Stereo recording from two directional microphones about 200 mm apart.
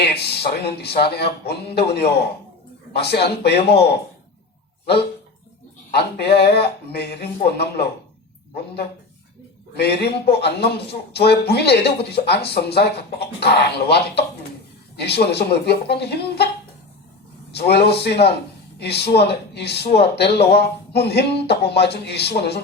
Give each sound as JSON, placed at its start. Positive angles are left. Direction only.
{"t": 0.0, "sound": "a man's voice", "side_deg": 55}
{"t": 5.9, "sound": "a man's voice", "side_deg": 55}
{"t": 17.5, "sound": "a man's voice", "side_deg": 55}